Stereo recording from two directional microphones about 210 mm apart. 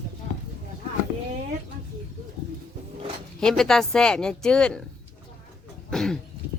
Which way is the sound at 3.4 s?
5° left (ahead or behind).